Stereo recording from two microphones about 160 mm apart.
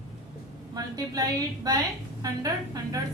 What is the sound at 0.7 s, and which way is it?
A woman's voice, 25° right (ahead or behind).